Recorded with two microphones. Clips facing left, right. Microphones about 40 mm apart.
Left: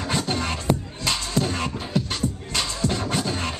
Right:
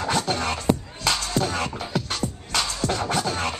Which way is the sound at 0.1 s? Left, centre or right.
Centre.